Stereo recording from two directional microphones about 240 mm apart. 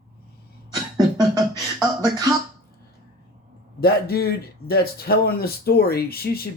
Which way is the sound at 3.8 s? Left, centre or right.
Left.